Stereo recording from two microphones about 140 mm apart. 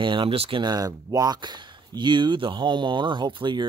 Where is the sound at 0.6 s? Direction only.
25° right (ahead or behind).